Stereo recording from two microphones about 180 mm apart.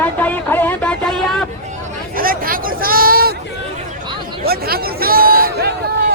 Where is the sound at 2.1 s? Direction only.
50° right (ahead or behind).